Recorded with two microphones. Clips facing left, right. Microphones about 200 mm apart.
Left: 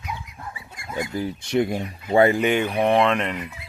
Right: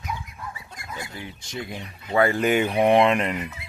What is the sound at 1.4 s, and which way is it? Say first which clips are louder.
Speech: left 13 dB; 65° left (ahead or behind).